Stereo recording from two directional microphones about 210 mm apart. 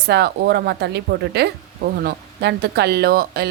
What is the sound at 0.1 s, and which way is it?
Speech, 50° right (ahead or behind).